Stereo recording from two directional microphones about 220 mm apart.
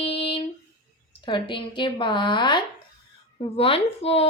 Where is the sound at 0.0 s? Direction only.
25° left (ahead or behind).